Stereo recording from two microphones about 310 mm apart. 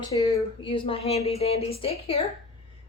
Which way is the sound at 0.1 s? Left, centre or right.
Centre.